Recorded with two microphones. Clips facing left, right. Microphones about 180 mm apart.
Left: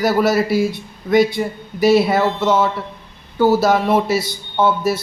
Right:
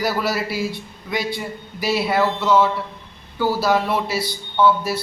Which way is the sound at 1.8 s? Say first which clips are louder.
Left 6 dB; 50° left (ahead or behind).